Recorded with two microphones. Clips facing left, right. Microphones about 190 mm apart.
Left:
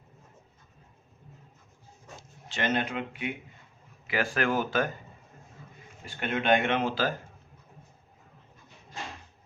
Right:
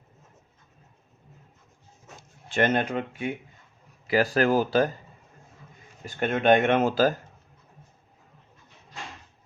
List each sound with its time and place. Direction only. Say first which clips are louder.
2.5 s speech: right 6 dB; 50° right (ahead or behind); by 4.9 s 35° right (ahead or behind)
6.1 s speech: right 5 dB; 45° right (ahead or behind)